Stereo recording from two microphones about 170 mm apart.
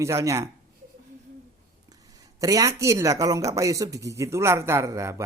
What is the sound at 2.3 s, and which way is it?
Speech, 20° right (ahead or behind).